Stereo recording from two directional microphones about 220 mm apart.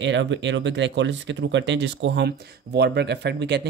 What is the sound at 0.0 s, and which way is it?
Speech, 55° right (ahead or behind).